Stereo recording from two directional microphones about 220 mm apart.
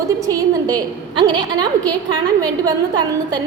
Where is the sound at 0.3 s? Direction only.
15° right (ahead or behind).